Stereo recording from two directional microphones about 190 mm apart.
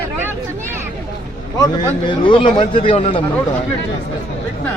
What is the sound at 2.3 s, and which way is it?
Speech, 25° left (ahead or behind).